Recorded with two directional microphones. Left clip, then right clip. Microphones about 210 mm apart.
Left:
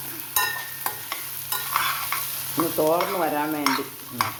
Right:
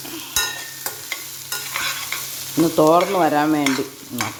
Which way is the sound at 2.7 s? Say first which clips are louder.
Right 7 dB; 45° right (ahead or behind).